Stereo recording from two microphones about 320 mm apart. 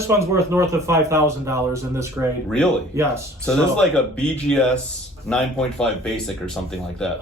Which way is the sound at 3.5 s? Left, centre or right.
Centre.